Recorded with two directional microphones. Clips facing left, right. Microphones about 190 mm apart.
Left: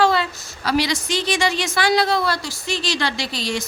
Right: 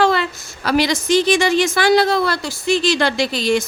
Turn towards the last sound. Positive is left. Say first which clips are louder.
# right 8 dB
turn(degrees=-55)  # may be behind; listen again after turning